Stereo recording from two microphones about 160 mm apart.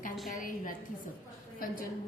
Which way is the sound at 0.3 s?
55° left (ahead or behind).